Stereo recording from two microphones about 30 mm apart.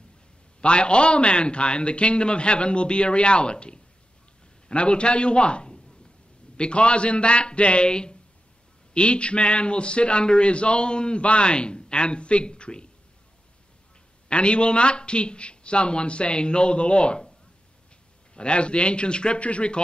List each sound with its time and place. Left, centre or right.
0.6 s a man's voice: left
14.3 s a man's voice: left
18.3 s a man's voice: left
19.4 s speech: left